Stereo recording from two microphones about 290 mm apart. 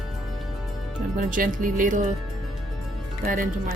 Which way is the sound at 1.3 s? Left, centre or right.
Right.